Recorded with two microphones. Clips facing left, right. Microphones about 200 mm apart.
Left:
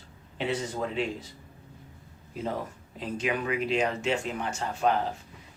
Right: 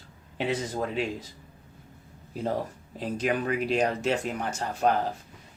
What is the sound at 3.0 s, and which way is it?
Speech, 40° right (ahead or behind).